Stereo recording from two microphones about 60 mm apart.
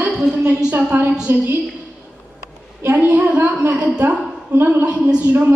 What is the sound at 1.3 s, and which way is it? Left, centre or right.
Speech, right.